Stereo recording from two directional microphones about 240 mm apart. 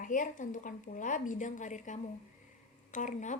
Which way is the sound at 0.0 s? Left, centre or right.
Left.